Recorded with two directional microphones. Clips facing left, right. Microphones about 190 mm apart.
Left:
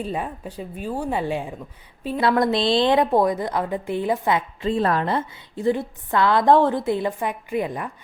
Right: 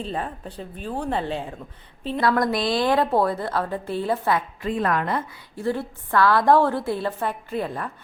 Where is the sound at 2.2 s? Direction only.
25° left (ahead or behind).